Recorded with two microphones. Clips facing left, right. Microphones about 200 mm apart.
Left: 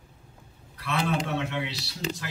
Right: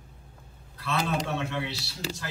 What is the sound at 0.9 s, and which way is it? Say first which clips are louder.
Speech: left 1 dB; 15° left (ahead or behind).